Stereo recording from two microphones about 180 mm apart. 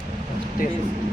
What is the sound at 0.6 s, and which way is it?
Speech, 50° left (ahead or behind).